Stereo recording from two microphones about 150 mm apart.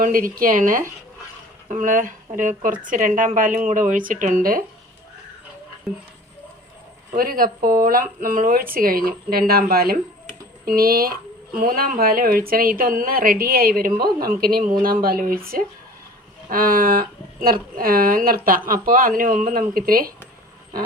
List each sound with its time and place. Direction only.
0.0 s speech: 70° right (ahead or behind)
7.2 s speech: 75° right (ahead or behind)
16.5 s speech: 70° right (ahead or behind)